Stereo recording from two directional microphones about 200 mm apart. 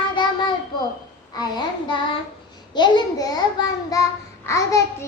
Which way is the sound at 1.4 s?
20° left (ahead or behind).